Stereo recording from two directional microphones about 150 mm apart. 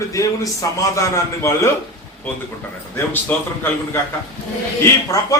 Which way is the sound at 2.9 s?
15° left (ahead or behind).